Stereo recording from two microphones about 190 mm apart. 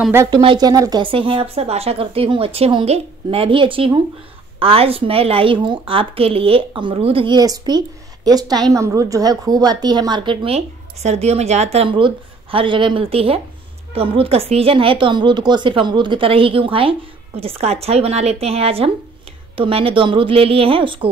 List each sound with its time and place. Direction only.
0.1 s a woman's voice: 15° right (ahead or behind)